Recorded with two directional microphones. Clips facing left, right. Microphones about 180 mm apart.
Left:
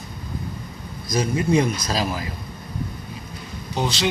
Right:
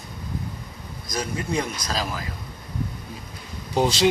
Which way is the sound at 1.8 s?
10° left (ahead or behind).